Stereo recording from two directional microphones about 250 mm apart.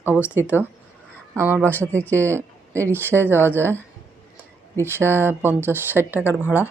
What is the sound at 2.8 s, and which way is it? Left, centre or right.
Speech, centre.